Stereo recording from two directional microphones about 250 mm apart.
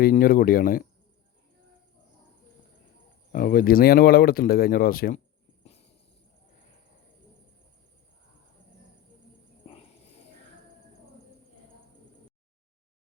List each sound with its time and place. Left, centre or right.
0.0 s speech: left
3.3 s speech: left